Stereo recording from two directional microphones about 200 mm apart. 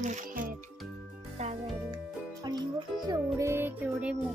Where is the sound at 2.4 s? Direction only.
20° right (ahead or behind).